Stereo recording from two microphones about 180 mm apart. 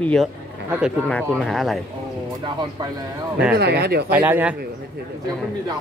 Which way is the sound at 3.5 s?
65° right (ahead or behind).